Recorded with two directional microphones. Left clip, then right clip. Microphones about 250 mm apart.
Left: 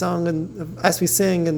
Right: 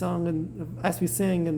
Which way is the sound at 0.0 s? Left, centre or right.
Centre.